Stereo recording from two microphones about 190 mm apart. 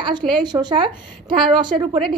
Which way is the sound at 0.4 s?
25° right (ahead or behind).